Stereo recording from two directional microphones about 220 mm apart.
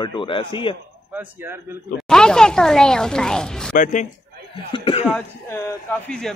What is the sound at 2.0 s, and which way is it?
Speech, 5° left (ahead or behind).